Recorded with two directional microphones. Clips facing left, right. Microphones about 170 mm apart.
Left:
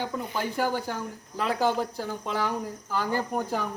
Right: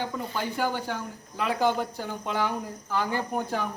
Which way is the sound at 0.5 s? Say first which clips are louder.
Left 1 dB; 40° left (ahead or behind).